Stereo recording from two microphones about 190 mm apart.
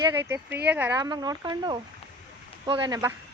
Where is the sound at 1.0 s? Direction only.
20° right (ahead or behind).